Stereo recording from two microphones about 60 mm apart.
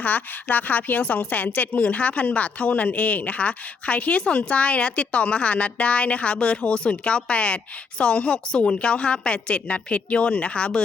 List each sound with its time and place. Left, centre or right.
0.0 s a woman's voice: left